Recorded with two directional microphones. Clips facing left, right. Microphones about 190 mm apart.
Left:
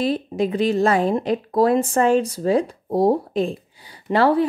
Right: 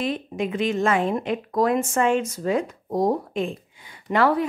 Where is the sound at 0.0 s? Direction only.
35° left (ahead or behind).